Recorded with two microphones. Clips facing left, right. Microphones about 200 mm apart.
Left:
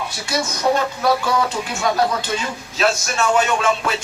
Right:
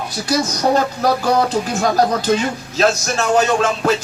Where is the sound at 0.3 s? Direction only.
35° right (ahead or behind).